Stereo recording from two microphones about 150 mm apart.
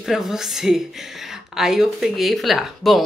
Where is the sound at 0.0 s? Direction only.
Centre (ahead or behind).